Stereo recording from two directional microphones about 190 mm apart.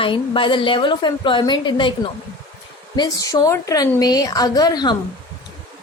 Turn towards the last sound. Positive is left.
turn(degrees=20)  # may be behind; listen again after turning